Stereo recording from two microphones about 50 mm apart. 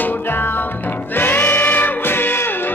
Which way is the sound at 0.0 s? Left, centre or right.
Left.